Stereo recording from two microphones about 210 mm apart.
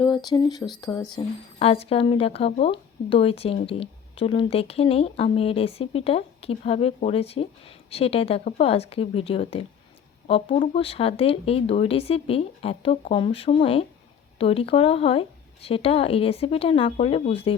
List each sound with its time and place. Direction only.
0.3 s speech: 20° left (ahead or behind)